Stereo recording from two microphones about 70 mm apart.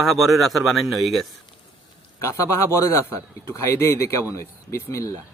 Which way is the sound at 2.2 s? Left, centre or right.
Left.